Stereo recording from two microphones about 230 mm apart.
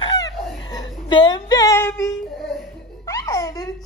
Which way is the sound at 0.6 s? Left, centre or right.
Centre.